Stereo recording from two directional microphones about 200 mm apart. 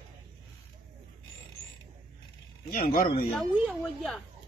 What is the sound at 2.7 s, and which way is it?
Speech, 45° left (ahead or behind).